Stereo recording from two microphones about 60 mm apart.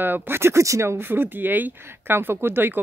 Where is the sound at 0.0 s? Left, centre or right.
Right.